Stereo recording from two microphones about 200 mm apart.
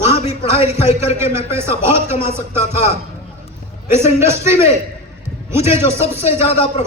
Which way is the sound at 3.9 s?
35° left (ahead or behind).